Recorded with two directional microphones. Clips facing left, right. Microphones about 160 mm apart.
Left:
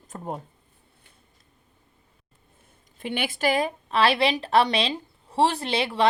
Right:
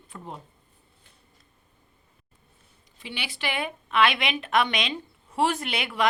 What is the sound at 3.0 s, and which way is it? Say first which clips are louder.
A woman's voice: left 8 dB; 50° left (ahead or behind).